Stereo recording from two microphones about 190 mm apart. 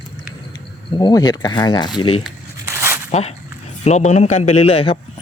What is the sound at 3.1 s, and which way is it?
A man's voice, 35° left (ahead or behind).